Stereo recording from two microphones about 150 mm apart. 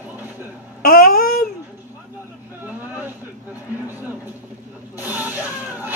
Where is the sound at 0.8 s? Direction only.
75° left (ahead or behind).